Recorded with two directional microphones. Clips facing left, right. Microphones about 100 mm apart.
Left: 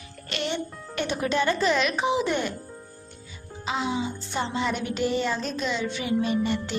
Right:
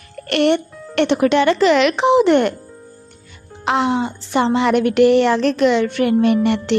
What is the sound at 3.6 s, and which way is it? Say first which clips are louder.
Speech: right 10 dB; 70° right (ahead or behind).